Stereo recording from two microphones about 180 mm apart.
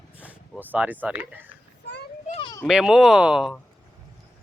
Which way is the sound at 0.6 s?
10° right (ahead or behind).